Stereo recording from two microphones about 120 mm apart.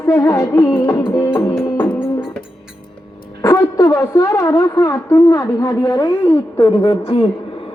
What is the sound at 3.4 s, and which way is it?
A woman's voice, 25° left (ahead or behind).